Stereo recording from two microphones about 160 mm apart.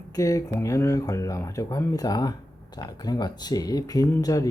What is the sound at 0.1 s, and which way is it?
Speech, 20° left (ahead or behind).